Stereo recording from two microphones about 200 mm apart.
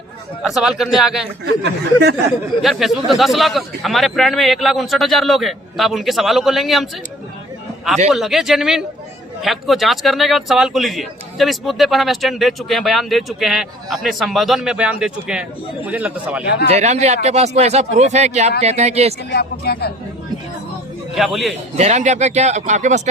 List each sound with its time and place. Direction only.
0.4 s speech: centre (ahead or behind)
1.5 s speech: 55° right (ahead or behind)
2.6 s speech: centre (ahead or behind)
8.1 s speech: centre (ahead or behind)
16.6 s speech: 35° right (ahead or behind)
19.3 s speech: 55° left (ahead or behind)
21.2 s speech: centre (ahead or behind)
21.8 s speech: 35° right (ahead or behind)